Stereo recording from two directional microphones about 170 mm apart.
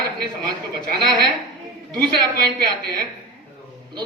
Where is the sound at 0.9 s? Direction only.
25° right (ahead or behind).